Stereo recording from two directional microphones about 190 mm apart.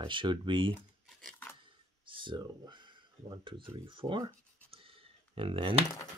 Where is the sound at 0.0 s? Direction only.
25° right (ahead or behind).